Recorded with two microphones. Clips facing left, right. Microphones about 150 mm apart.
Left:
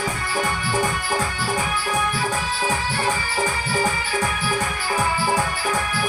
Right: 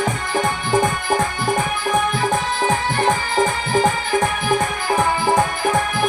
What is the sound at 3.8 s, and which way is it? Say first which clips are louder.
Music: right 7 dB; 55° right (ahead or behind).